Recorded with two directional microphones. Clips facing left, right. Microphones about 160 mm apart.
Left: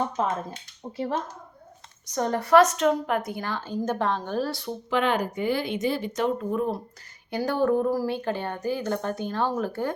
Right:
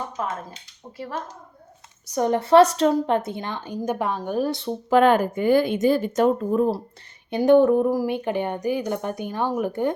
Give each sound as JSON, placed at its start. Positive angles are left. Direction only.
{"t": 0.2, "sound": "speech", "side_deg": 25}
{"t": 2.1, "sound": "a woman's voice", "side_deg": -20}
{"t": 4.9, "sound": "speech", "side_deg": -45}
{"t": 7.3, "sound": "a woman's voice", "side_deg": -20}